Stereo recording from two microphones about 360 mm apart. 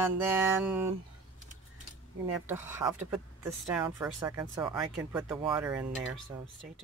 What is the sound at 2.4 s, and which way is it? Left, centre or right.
Speech, centre.